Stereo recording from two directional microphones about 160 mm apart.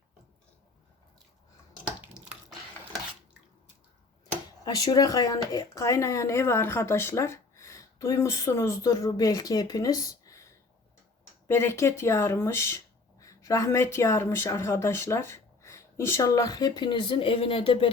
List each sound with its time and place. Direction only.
2.1 s a sound: 5° right (ahead or behind)
4.6 s speech: 25° left (ahead or behind)
11.4 s speech: 15° left (ahead or behind); by 17.9 s 35° left (ahead or behind)